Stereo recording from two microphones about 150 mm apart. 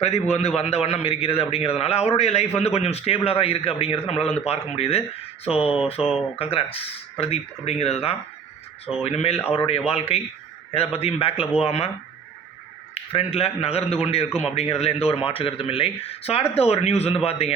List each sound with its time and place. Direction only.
0.0 s a man's voice: 45° left (ahead or behind)
6.0 s speech: 5° right (ahead or behind)
6.4 s a man's voice: 40° left (ahead or behind)
12.9 s a man's voice: 40° left (ahead or behind)